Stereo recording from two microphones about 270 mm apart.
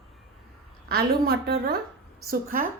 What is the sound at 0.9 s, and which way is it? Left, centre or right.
A woman's voice, right.